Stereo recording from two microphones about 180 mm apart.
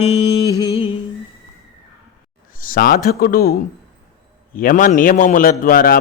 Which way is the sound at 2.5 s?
50° left (ahead or behind).